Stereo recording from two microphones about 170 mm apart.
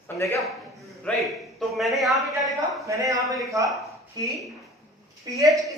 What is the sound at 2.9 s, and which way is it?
Speech, 20° right (ahead or behind).